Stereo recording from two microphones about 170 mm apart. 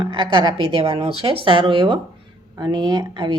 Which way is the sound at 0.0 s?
25° right (ahead or behind).